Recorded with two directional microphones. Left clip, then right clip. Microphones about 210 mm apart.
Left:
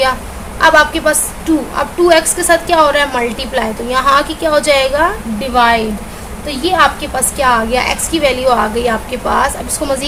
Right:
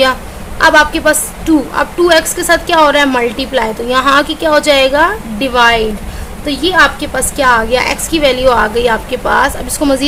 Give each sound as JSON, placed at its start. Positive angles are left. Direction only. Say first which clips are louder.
{"t": 0.6, "sound": "a woman's voice", "louder": "right 1 dB", "side_deg": -25}